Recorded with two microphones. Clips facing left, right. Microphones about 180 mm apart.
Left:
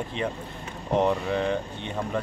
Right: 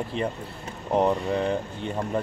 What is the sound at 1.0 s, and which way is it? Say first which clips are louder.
Speech: right 1 dB; 5° right (ahead or behind).